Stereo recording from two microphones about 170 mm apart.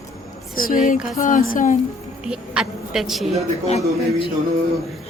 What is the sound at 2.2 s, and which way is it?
A woman's voice, 5° right (ahead or behind).